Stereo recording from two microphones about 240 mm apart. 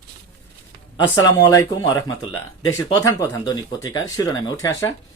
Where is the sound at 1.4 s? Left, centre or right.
Centre.